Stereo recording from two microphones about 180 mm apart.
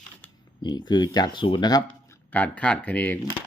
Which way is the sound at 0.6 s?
25° left (ahead or behind).